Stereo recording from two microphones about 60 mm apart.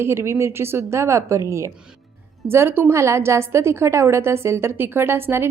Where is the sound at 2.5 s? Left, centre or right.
Right.